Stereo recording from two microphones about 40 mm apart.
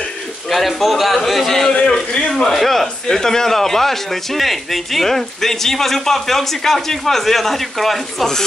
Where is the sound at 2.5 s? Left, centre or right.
Centre.